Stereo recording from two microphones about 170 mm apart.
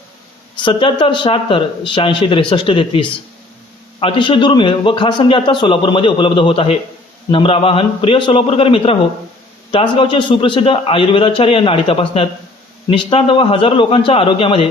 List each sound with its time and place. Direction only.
0.6 s a man's voice: 30° left (ahead or behind)